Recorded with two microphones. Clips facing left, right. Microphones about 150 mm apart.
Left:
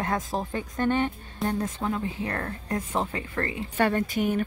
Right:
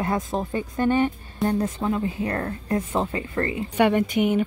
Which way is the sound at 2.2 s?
30° right (ahead or behind).